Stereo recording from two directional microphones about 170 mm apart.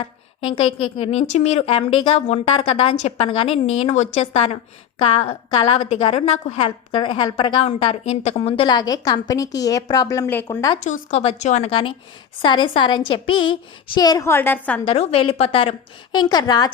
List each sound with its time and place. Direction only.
0.0 s a woman's voice: 30° left (ahead or behind)
10.8 s a woman's voice: 45° left (ahead or behind); by 14.8 s 10° left (ahead or behind)
14.8 s a woman's voice: 35° left (ahead or behind)